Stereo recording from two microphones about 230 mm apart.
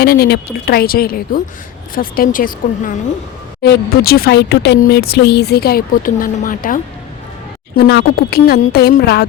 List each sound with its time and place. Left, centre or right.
0.0 s speech: left
7.8 s speech: left